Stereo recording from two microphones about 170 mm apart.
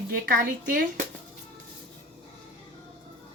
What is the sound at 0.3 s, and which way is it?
Speech, 65° right (ahead or behind).